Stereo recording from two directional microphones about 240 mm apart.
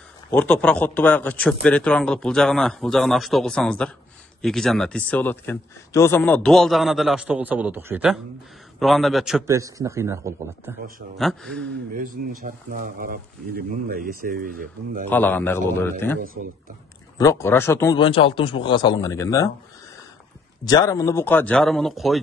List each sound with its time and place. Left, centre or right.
0.3 s speech: centre
9.5 s a man's voice: centre
11.1 s speech: centre
11.9 s speech: right
15.0 s a man's voice: centre
17.2 s a man's voice: centre
20.6 s a man's voice: centre